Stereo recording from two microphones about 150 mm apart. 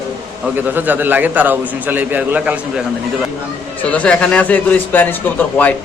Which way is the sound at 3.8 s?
10° left (ahead or behind).